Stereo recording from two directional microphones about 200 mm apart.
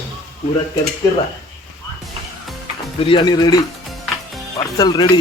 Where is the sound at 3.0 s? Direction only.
25° left (ahead or behind).